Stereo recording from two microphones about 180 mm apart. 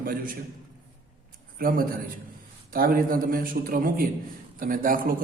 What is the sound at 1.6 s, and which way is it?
A man's voice, 55° right (ahead or behind).